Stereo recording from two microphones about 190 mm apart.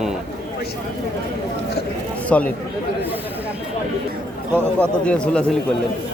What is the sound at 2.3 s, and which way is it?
Speech, 5° left (ahead or behind).